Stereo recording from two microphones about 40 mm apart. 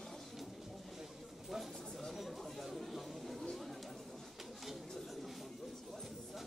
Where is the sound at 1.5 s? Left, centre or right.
Centre.